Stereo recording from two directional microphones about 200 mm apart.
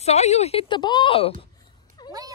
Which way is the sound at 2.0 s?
20° left (ahead or behind).